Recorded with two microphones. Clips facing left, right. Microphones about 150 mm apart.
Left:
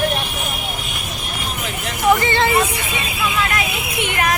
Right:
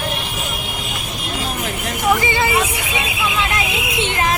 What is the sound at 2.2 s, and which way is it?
Speech, 10° right (ahead or behind).